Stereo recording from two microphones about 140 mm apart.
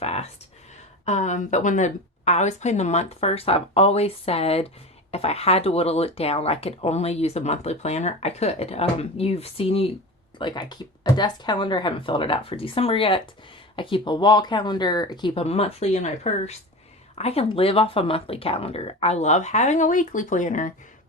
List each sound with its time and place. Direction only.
0.0 s a sound: 45° left (ahead or behind)
1.0 s speech: 55° left (ahead or behind)
10.3 s speech: 35° left (ahead or behind)
15.4 s speech: 45° left (ahead or behind); by 20.7 s 65° left (ahead or behind)